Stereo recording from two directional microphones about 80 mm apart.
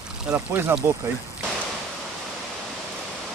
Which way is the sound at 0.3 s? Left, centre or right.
Right.